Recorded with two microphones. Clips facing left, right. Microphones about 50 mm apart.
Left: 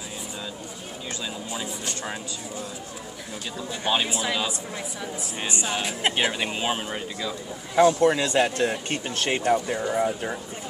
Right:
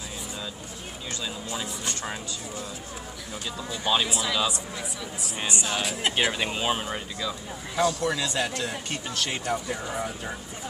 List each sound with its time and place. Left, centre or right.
1.5 s speech: centre
3.8 s speech: left
5.5 s speech: left
6.3 s speech: centre
7.7 s speech: left
9.5 s speech: left